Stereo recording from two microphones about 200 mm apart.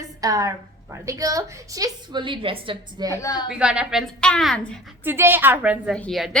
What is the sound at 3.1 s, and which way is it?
Speech, 20° left (ahead or behind).